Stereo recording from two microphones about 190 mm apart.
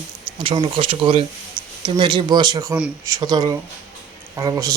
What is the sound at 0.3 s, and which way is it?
A man's voice, 25° right (ahead or behind).